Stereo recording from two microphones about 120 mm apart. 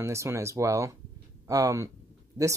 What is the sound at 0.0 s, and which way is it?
Speech, 25° right (ahead or behind).